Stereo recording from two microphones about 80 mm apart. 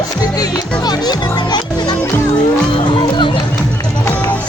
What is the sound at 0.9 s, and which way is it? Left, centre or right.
A child's voice, left.